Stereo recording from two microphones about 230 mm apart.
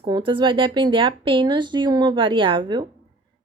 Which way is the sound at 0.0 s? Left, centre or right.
Right.